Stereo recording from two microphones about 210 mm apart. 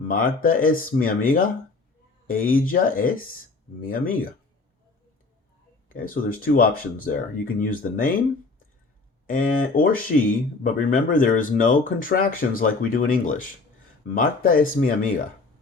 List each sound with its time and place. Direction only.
0.0 s speech: 45° left (ahead or behind)
5.9 s speech: 40° left (ahead or behind)
9.2 s speech: 40° left (ahead or behind)